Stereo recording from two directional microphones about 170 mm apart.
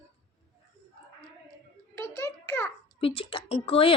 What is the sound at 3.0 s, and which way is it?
Speech, 35° left (ahead or behind).